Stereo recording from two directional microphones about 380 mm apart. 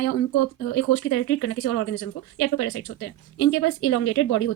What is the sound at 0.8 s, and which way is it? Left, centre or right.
A woman's voice, left.